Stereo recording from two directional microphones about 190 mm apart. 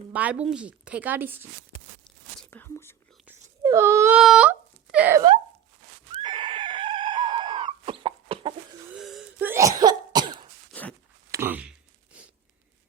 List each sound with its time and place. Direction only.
0.1 s speech: 5° right (ahead or behind)
2.0 s whispering: 10° left (ahead or behind)
3.6 s speech: 15° right (ahead or behind)
4.2 s speech: 5° right (ahead or behind)
6.1 s screaming: 30° right (ahead or behind)
9.0 s wheeze: centre (ahead or behind)
9.5 s cough: 15° right (ahead or behind)
10.7 s a sound: 5° left (ahead or behind)
11.3 s a sound: 10° right (ahead or behind)